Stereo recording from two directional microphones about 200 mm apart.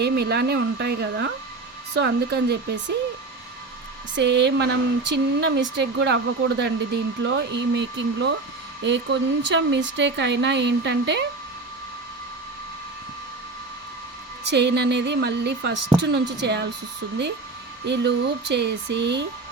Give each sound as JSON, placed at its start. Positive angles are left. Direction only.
{"t": 0.0, "sound": "speech", "side_deg": -55}
{"t": 4.1, "sound": "speech", "side_deg": -60}
{"t": 14.5, "sound": "speech", "side_deg": -60}
{"t": 17.8, "sound": "speech", "side_deg": -60}